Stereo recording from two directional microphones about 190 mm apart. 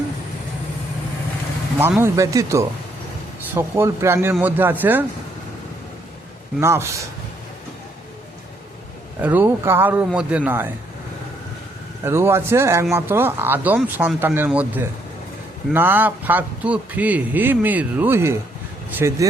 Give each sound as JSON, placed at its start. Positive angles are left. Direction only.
{"t": 1.8, "sound": "speech", "side_deg": -15}
{"t": 6.6, "sound": "speech", "side_deg": -15}
{"t": 9.2, "sound": "speech", "side_deg": -10}
{"t": 12.0, "sound": "speech", "side_deg": -15}